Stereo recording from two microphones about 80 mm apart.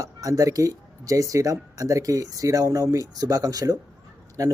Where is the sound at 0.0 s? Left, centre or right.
Right.